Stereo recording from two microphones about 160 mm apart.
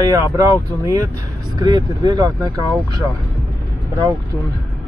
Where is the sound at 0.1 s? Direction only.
20° right (ahead or behind).